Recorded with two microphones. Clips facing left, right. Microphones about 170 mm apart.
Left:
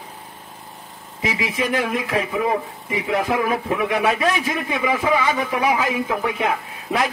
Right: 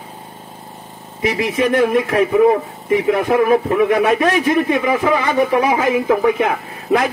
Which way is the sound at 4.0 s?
55° right (ahead or behind).